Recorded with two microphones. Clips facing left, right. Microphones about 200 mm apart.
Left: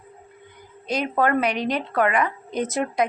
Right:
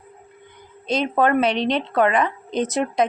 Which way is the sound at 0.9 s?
25° right (ahead or behind).